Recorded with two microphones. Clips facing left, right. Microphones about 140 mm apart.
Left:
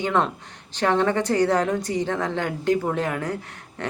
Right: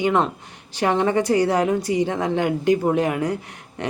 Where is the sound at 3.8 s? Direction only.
15° right (ahead or behind).